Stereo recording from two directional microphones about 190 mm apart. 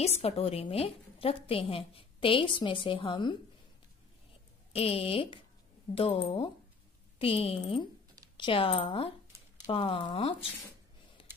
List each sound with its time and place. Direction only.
0.0 s a woman's voice: 30° left (ahead or behind)
4.7 s a woman's voice: 30° left (ahead or behind)
11.2 s a sound: 30° left (ahead or behind)